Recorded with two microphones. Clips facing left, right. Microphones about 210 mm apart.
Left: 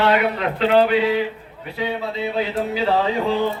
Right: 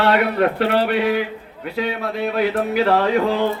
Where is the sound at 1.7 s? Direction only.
80° right.